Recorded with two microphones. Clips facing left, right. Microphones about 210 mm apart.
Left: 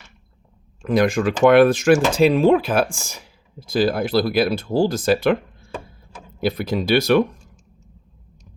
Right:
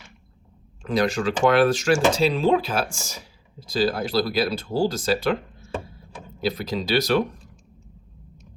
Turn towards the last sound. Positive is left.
turn(degrees=55)  # may be behind; listen again after turning